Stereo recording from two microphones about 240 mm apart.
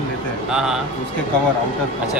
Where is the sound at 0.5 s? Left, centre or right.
Centre.